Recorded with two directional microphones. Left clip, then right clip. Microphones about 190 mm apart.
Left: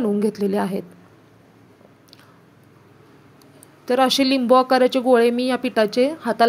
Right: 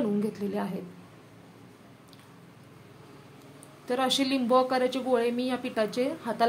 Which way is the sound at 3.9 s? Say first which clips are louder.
Left 9 dB; 35° left (ahead or behind).